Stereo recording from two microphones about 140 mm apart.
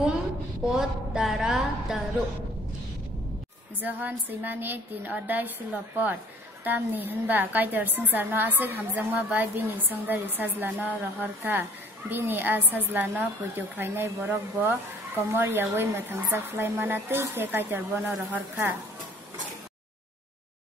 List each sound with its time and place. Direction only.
0.7 s a woman's voice: 5° right (ahead or behind)
3.8 s a woman's voice: 10° right (ahead or behind)